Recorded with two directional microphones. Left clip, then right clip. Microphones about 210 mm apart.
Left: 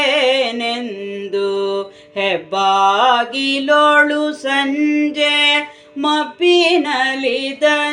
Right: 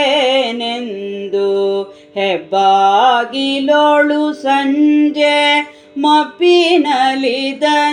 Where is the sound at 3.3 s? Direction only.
10° right (ahead or behind).